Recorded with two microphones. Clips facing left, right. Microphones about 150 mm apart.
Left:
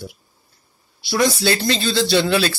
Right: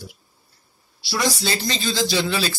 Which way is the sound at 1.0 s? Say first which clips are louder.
Left 5 dB; 55° left (ahead or behind).